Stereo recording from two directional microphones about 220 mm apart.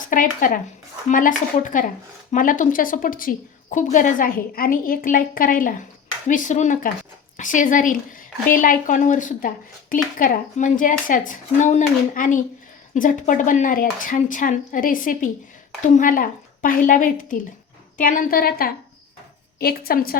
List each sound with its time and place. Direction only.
0.1 s a woman's voice: 40° left (ahead or behind)